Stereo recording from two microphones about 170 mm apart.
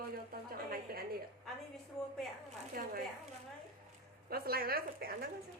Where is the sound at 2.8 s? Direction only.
60° right (ahead or behind).